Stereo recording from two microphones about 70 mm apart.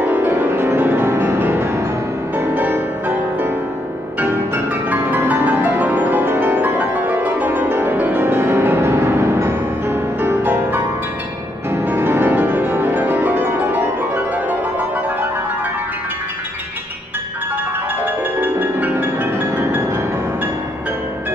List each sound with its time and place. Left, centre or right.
0.0 s music: right
4.8 s music: right
10.4 s music: right
18.0 s music: right